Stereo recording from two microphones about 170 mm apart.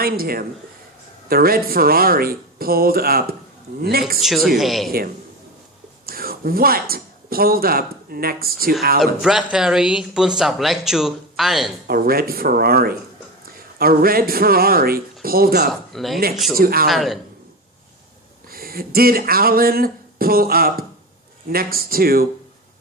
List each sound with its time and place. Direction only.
0.0 s speech: 60° right (ahead or behind)
4.2 s speech: centre (ahead or behind)
4.9 s speech: 60° right (ahead or behind)
9.0 s speech: centre (ahead or behind)
11.9 s speech: 60° right (ahead or behind)
15.9 s speech: centre (ahead or behind)
16.6 s speech: 60° right (ahead or behind)
16.9 s speech: centre (ahead or behind)
18.4 s speech: 60° right (ahead or behind)